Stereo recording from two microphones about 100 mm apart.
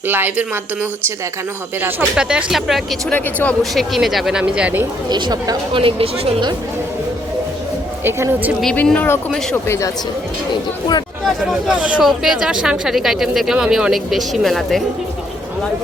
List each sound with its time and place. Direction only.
0.1 s a woman's voice: 20° right (ahead or behind)
2.1 s speech: 5° right (ahead or behind)
5.0 s speech: 45° right (ahead or behind)
5.7 s speech: 60° right (ahead or behind)
8.0 s a woman's voice: 20° right (ahead or behind)
8.7 s speech: 15° left (ahead or behind)
11.3 s speech: 5° right (ahead or behind)